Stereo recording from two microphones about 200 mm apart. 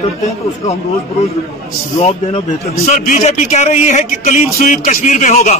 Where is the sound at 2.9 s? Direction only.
40° left (ahead or behind).